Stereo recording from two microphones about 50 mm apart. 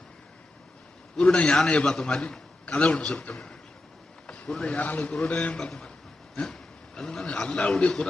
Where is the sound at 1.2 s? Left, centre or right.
Centre.